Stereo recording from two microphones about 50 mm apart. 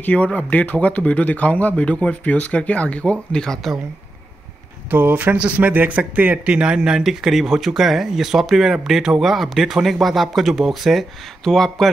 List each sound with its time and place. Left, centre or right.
0.0 s speech: left
4.9 s speech: right
6.5 s speech: centre
11.4 s speech: centre